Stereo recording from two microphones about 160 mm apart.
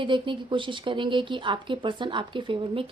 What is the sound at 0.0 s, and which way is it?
Speech, 30° right (ahead or behind).